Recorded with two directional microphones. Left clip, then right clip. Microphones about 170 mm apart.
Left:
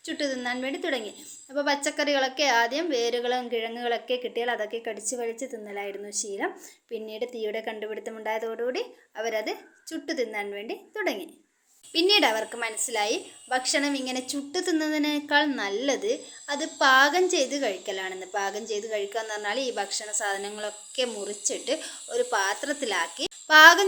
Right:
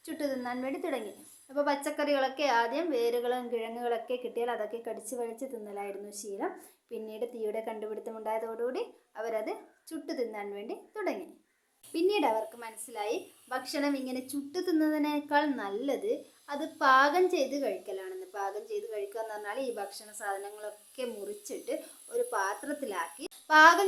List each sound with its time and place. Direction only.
0.0 s a woman's voice: 15° left (ahead or behind)